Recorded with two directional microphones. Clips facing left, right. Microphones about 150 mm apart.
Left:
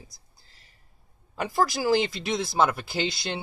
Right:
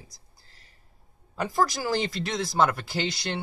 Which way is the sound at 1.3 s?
5° left (ahead or behind).